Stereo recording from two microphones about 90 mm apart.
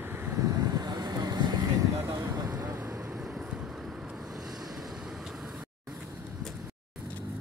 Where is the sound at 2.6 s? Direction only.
35° right (ahead or behind).